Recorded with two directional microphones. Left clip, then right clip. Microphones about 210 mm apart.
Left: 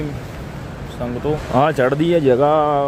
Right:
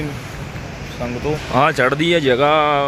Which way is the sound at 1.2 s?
20° left (ahead or behind).